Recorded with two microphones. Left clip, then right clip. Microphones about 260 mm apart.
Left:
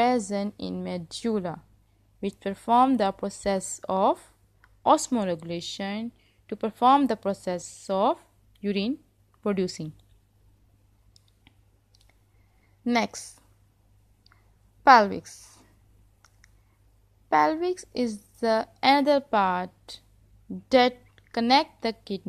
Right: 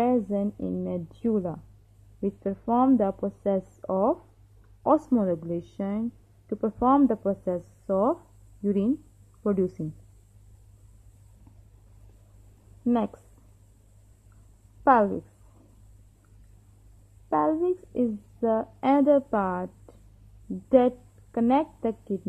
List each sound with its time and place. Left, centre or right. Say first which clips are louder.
0.0 s a woman's voice: left 1 dB; left
9.4 s a woman's voice: right 1 dB; left
14.9 s a woman's voice: left 4 dB; left
17.3 s a woman's voice: left 2 dB; left